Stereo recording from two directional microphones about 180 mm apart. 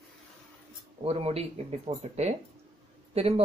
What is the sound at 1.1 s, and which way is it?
Speech, 35° right (ahead or behind).